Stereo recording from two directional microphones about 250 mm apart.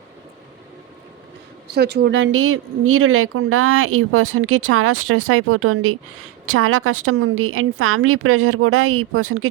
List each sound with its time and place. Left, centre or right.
1.7 s speech: right